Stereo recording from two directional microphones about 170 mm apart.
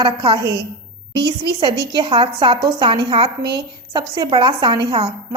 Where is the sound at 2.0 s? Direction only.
30° right (ahead or behind).